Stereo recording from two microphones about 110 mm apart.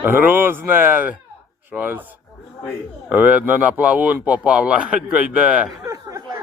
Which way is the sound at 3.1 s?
15° right (ahead or behind).